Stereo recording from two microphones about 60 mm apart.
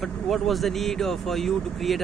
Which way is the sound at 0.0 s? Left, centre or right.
Centre.